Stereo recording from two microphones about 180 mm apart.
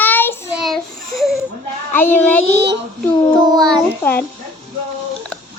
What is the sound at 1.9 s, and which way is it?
Child singing, 10° left (ahead or behind).